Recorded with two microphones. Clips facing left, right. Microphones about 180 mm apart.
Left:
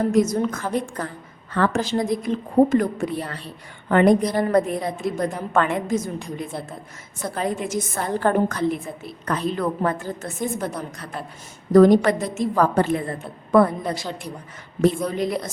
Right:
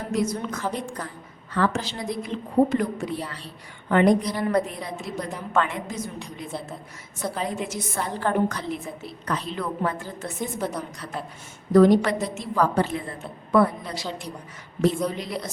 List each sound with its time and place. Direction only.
0.1 s a woman's voice: 45° left (ahead or behind)
11.7 s a woman's voice: 45° left (ahead or behind)